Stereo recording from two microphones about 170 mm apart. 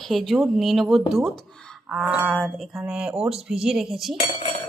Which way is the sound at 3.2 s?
35° right (ahead or behind).